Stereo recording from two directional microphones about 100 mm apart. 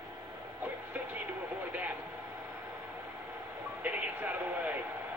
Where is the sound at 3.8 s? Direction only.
15° right (ahead or behind).